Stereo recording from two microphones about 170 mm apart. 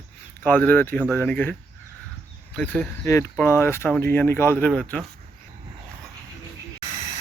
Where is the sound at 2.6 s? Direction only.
10° left (ahead or behind).